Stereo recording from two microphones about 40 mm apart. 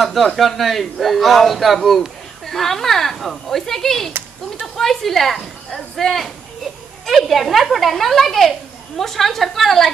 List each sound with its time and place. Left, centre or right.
0.0 s speech: centre